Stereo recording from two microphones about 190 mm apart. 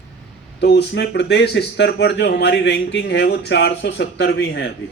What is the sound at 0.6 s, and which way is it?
Speech, 65° left (ahead or behind).